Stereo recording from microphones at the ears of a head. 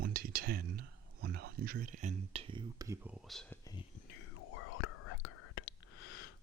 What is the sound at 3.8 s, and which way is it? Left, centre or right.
Whispering, left.